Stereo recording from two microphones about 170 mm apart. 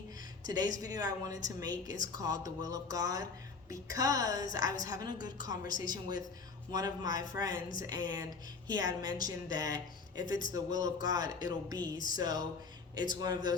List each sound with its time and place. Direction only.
0.4 s a woman's voice: 25° right (ahead or behind)
10.2 s speech: 50° left (ahead or behind)
10.5 s a woman's voice: 20° right (ahead or behind)
11.9 s speech: 50° left (ahead or behind)
12.2 s a woman's voice: 25° right (ahead or behind)